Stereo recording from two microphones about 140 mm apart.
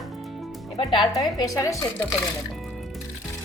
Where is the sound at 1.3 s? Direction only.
25° left (ahead or behind).